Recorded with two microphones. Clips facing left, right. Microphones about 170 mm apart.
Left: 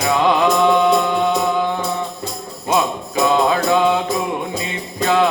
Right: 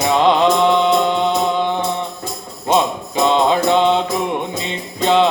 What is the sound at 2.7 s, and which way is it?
Mantra, 25° right (ahead or behind).